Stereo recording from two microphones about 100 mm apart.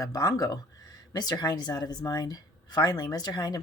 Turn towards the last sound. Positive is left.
turn(degrees=40)  # may be behind; listen again after turning